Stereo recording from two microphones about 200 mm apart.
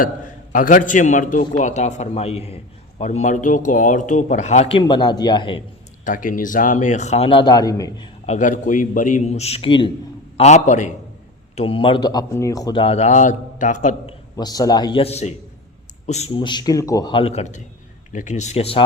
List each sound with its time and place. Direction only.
0.5 s speech: 40° left (ahead or behind); by 5.6 s 25° left (ahead or behind)
6.1 s speech: 40° left (ahead or behind); by 8.1 s 20° left (ahead or behind)
8.3 s a man's voice: 40° left (ahead or behind)
14.3 s a man's voice: 20° left (ahead or behind)